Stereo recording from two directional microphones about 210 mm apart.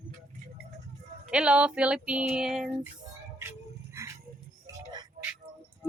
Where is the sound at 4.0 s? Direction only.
15° right (ahead or behind).